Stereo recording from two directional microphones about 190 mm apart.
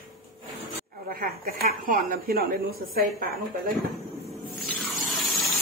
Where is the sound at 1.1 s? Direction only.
50° right (ahead or behind).